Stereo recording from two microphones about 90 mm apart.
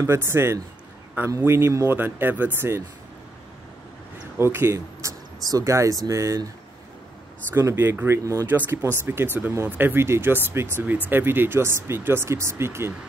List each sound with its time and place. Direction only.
0.0 s speech: 25° right (ahead or behind)
4.4 s speech: 25° right (ahead or behind)
7.5 s speech: 30° right (ahead or behind)
8.5 s speech: 20° right (ahead or behind)